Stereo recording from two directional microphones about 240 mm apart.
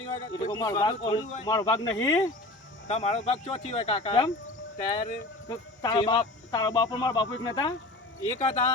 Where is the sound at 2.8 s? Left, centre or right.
Left.